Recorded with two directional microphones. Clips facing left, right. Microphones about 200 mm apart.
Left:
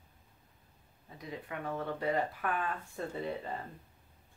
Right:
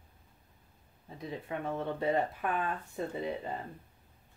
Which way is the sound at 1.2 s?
25° right (ahead or behind).